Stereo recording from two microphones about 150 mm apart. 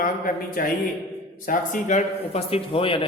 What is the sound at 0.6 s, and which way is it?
Speech, 70° left (ahead or behind).